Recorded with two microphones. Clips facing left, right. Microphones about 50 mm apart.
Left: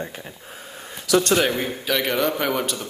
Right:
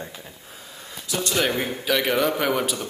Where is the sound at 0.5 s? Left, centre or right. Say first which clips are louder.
Left 3 dB; left.